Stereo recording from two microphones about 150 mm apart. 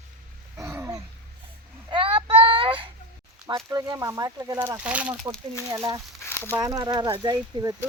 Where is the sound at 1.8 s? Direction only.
35° right (ahead or behind).